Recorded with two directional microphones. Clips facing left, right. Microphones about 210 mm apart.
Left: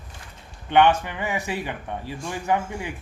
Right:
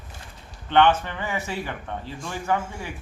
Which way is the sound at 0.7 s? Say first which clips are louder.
Left 1 dB; 15° left (ahead or behind).